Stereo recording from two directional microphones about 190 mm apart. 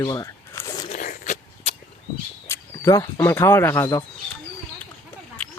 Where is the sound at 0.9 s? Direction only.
45° left (ahead or behind).